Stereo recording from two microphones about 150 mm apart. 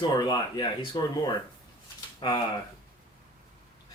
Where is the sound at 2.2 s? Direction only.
30° left (ahead or behind).